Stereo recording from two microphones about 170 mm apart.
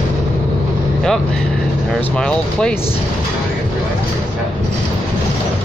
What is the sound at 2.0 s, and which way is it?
Speech, 5° left (ahead or behind).